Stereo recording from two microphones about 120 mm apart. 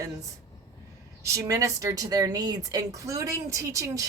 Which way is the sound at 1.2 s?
25° right (ahead or behind).